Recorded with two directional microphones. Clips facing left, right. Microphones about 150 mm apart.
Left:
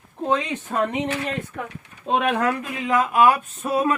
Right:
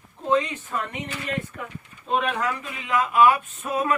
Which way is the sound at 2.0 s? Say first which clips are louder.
Left 4 dB; 65° left (ahead or behind).